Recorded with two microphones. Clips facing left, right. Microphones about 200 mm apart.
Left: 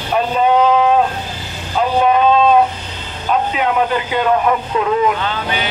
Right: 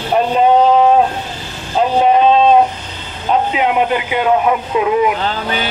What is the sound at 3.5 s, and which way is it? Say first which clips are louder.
Speech: right 2 dB; 15° right (ahead or behind).